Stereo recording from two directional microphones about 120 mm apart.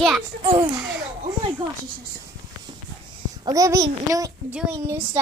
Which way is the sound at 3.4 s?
30° right (ahead or behind).